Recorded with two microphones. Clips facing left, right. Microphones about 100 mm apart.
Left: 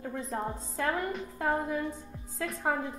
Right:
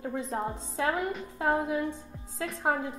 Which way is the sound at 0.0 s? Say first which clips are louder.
Right 2 dB; 15° right (ahead or behind).